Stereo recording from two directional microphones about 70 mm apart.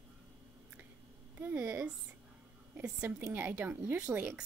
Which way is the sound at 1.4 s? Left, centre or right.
Right.